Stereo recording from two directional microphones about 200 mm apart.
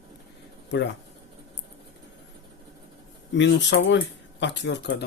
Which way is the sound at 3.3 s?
65° left (ahead or behind).